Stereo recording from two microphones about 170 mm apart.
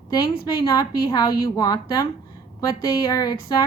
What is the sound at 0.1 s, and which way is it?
A woman's voice, 25° left (ahead or behind).